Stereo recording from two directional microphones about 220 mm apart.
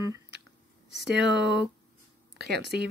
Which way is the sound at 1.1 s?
50° right (ahead or behind).